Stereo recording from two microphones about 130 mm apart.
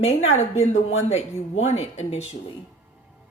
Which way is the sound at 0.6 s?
55° left (ahead or behind).